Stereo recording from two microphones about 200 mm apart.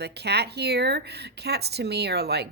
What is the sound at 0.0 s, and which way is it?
Speech, 55° right (ahead or behind).